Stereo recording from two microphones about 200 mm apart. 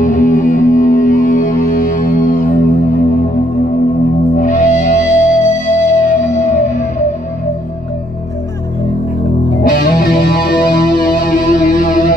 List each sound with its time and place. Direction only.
0.0 s music: 40° left (ahead or behind)
4.4 s music: 40° left (ahead or behind)
9.6 s music: 50° left (ahead or behind)